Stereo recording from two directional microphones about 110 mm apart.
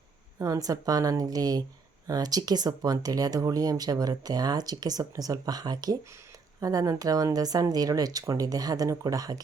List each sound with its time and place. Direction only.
0.3 s speech: 30° right (ahead or behind)